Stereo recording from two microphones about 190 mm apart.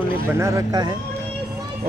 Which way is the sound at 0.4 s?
15° right (ahead or behind).